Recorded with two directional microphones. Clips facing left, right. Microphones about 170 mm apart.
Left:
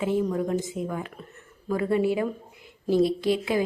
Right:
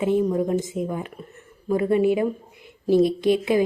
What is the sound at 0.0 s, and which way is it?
A woman's voice, 20° right (ahead or behind).